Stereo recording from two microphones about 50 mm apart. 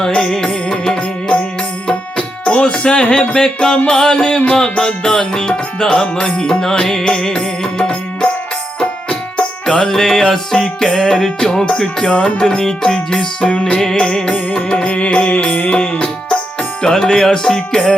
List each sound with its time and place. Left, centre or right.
0.1 s music: centre
9.6 s music: centre
11.6 s music: left